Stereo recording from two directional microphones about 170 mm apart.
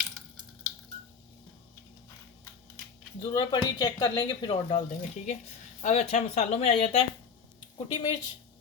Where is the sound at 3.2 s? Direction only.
30° left (ahead or behind).